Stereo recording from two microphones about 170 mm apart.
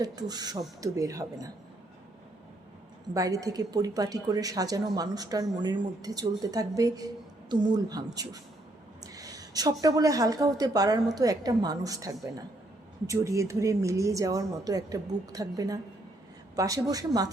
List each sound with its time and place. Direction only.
0.0 s a woman's voice: 25° right (ahead or behind)
3.2 s a woman's voice: 20° right (ahead or behind)